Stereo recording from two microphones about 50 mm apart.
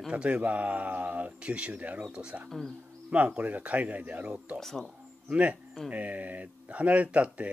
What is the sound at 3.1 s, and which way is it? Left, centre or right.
Speech, right.